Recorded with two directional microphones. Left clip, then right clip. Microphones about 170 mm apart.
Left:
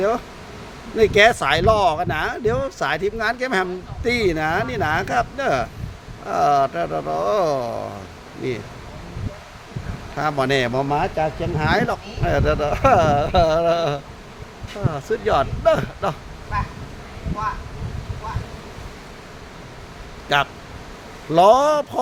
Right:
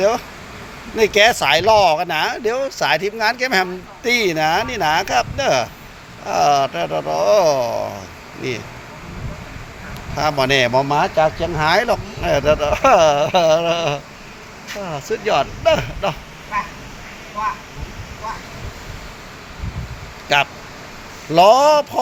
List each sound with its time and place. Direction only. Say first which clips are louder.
0.9 s speech: right 1 dB; 15° left (ahead or behind)
10.2 s speech: right 4 dB; 15° left (ahead or behind)
20.3 s speech: right 3 dB; 15° left (ahead or behind)